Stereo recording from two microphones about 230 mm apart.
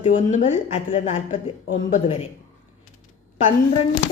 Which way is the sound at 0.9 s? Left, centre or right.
Left.